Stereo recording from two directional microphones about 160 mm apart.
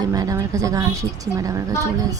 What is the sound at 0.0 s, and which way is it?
A woman's voice, 25° right (ahead or behind).